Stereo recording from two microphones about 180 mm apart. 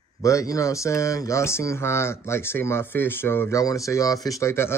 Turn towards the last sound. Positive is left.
turn(degrees=15)  # may be behind; listen again after turning